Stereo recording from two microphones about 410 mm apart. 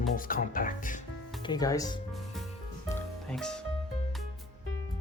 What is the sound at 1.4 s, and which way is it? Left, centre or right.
Music, centre.